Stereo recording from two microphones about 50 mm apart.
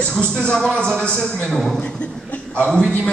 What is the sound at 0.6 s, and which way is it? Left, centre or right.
A man's voice, centre.